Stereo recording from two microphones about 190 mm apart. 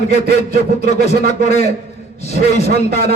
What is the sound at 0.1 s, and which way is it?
Speech, 55° right (ahead or behind).